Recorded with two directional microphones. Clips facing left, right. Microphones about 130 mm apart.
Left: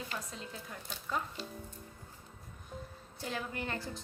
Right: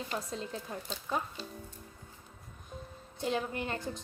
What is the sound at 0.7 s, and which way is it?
Speech, 20° right (ahead or behind).